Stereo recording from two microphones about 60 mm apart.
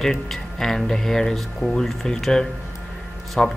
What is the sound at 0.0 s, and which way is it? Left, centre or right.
Speech, centre.